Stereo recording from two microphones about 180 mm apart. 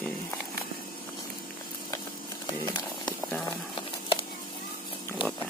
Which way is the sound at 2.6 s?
25° left (ahead or behind).